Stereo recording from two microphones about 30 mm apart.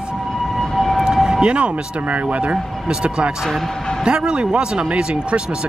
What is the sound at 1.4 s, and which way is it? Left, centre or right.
Speech, right.